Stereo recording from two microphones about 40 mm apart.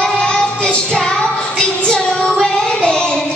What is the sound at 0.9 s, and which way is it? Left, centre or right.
Music, centre.